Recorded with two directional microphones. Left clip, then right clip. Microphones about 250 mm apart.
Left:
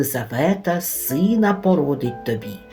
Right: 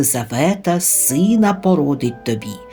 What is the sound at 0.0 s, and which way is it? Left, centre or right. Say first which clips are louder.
Speech: right 3 dB; right.